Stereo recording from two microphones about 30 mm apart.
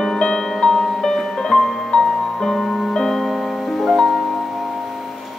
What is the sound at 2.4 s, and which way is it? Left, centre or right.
Music, centre.